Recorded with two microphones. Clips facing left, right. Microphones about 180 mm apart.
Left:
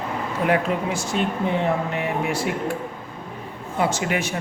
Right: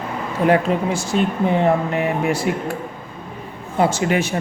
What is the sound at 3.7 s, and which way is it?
Speech, 30° right (ahead or behind).